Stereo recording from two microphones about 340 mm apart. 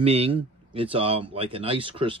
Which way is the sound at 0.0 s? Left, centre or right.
Centre.